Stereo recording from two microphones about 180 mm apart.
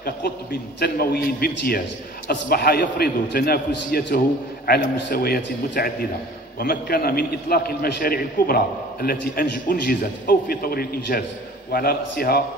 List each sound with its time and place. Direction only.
0.0 s a man's voice: 60° left (ahead or behind)